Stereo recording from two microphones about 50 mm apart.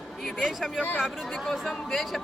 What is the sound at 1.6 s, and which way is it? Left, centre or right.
Speech, centre.